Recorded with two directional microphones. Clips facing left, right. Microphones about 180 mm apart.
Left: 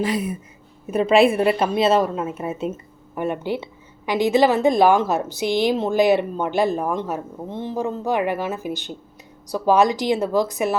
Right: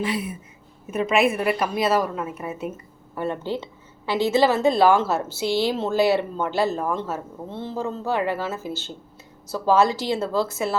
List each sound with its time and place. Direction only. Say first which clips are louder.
0.0 s a woman's voice: left 4 dB; 40° left (ahead or behind)
3.2 s a woman's voice: left 2 dB; 15° left (ahead or behind)